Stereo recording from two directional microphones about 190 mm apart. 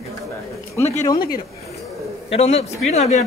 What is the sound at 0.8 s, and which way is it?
Speech, 15° left (ahead or behind).